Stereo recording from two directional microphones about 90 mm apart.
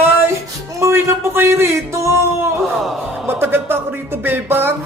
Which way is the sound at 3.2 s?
25° right (ahead or behind).